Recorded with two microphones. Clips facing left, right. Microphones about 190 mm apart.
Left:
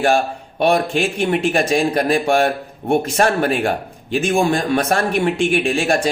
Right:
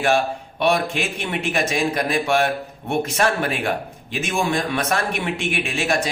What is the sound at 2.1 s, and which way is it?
Speech, 50° left (ahead or behind).